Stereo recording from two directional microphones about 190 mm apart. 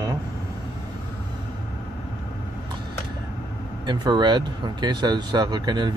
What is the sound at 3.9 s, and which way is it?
Speech, 25° right (ahead or behind).